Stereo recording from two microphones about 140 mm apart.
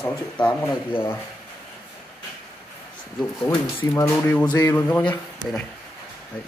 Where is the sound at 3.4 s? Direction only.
20° left (ahead or behind).